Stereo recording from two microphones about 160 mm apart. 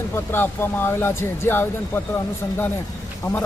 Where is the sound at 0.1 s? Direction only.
15° left (ahead or behind).